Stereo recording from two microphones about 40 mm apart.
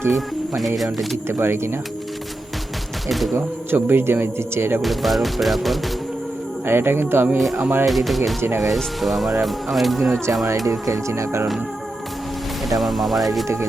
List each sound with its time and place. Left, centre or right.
0.1 s speech: centre
1.3 s speech: right
3.1 s speech: centre
3.8 s a man's voice: right
4.0 s speech: right
4.8 s speech: centre
6.7 s speech: right
7.3 s speech: centre
11.1 s speech: right
12.6 s speech: centre